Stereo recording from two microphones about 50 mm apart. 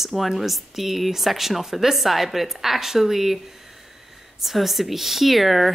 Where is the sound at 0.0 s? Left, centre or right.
Centre.